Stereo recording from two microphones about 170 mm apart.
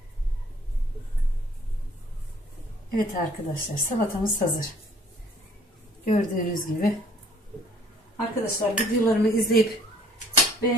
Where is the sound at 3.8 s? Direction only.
55° left (ahead or behind).